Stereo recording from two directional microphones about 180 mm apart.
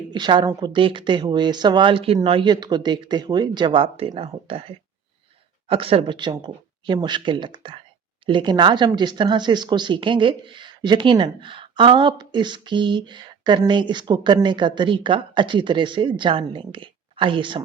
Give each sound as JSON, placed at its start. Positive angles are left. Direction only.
{"t": 0.1, "sound": "a woman's voice", "side_deg": -25}